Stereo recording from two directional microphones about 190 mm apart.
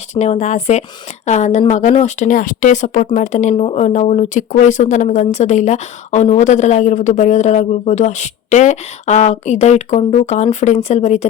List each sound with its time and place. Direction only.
0.1 s a woman's voice: 35° left (ahead or behind)